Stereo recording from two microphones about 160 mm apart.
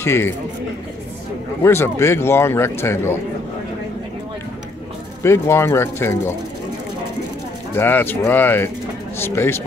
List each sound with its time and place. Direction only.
0.0 s speech: 15° left (ahead or behind)
1.6 s a man's voice: 15° left (ahead or behind)
5.2 s a man's voice: 15° left (ahead or behind)
7.7 s a man's voice: 15° left (ahead or behind)